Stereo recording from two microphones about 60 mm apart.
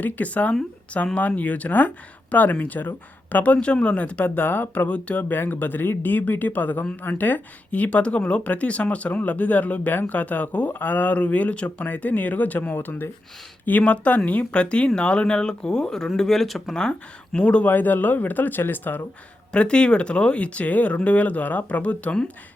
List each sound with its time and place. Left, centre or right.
0.0 s speech: left
13.7 s speech: left; by 16.9 s centre
17.3 s speech: centre
17.7 s speech: left
19.5 s speech: centre